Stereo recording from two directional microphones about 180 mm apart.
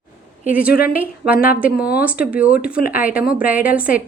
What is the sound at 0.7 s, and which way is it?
Speech, 55° left (ahead or behind).